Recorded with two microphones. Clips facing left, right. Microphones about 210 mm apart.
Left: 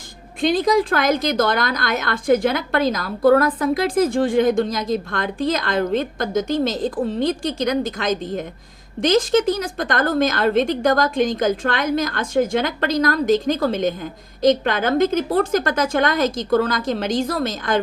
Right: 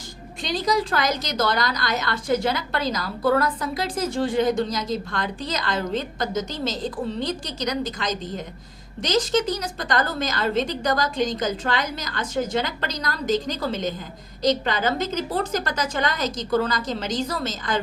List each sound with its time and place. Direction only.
0.4 s a woman's voice: 55° left (ahead or behind)